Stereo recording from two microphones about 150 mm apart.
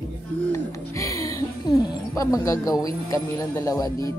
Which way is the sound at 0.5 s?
20° left (ahead or behind).